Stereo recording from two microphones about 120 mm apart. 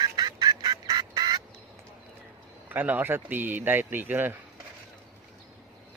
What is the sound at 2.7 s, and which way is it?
A man's voice, 15° right (ahead or behind).